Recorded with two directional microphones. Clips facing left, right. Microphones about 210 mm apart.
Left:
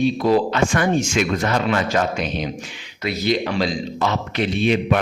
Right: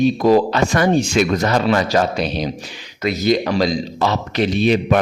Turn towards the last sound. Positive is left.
turn(degrees=-40)  # may be behind; listen again after turning